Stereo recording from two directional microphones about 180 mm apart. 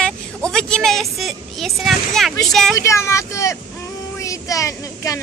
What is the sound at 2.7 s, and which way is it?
Speech, 15° left (ahead or behind).